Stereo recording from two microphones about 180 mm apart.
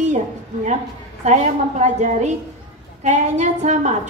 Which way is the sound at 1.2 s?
40° right (ahead or behind).